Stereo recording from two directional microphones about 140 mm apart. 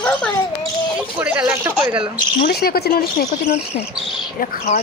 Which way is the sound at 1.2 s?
10° right (ahead or behind).